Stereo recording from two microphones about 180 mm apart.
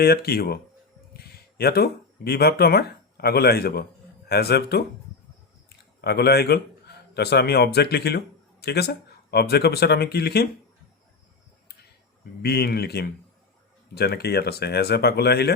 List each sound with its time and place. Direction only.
0.0 s speech: 60° left (ahead or behind)
5.6 s a sound: 65° left (ahead or behind)
7.1 s speech: 65° left (ahead or behind)
12.4 s speech: 65° left (ahead or behind)